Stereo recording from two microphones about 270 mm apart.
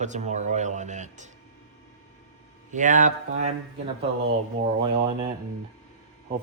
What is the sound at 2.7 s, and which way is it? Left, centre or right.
Speech, right.